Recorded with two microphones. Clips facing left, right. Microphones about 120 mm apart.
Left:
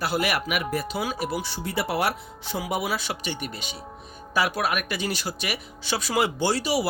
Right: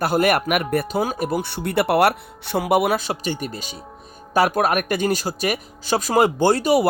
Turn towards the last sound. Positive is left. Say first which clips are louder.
# right 7 dB
turn(degrees=-50)  # may be behind; listen again after turning